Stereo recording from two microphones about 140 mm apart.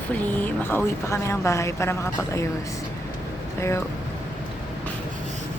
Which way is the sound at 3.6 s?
20° left (ahead or behind).